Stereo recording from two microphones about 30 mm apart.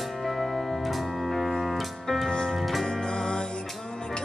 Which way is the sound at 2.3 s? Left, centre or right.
Left.